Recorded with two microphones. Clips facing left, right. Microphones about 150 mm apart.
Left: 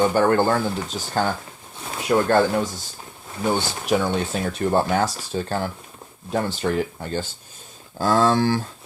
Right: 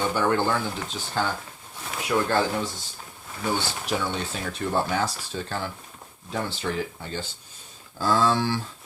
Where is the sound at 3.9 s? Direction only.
50° left (ahead or behind).